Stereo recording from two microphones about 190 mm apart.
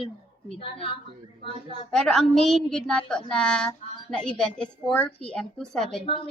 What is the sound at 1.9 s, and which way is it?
A woman's voice, 5° left (ahead or behind).